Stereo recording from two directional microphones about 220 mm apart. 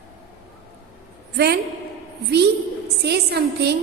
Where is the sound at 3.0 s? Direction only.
50° right (ahead or behind).